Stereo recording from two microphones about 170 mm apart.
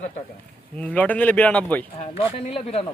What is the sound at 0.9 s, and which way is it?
Speech, 10° left (ahead or behind).